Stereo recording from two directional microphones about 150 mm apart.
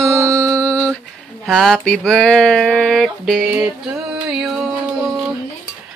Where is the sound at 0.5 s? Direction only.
10° left (ahead or behind).